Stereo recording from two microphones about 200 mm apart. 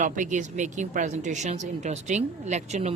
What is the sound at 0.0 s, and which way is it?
Speech, 40° right (ahead or behind).